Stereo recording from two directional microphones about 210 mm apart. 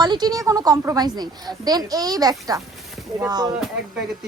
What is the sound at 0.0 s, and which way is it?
A woman's voice, 20° right (ahead or behind).